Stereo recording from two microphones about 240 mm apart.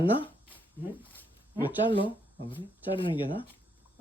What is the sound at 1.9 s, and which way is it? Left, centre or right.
Speech, left.